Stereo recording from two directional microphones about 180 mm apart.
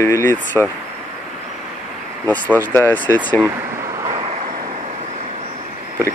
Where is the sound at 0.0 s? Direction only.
15° left (ahead or behind).